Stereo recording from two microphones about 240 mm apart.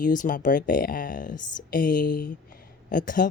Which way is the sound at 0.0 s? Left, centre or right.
Left.